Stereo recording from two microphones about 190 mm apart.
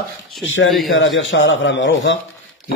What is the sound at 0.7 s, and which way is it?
Speech, centre (ahead or behind).